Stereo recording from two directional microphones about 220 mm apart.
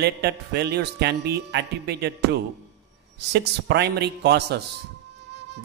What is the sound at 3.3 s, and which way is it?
A man's voice, 50° right (ahead or behind).